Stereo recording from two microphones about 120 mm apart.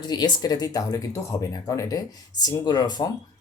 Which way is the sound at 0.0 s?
35° left (ahead or behind).